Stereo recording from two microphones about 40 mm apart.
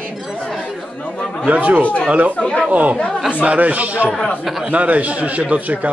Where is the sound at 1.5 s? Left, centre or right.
Right.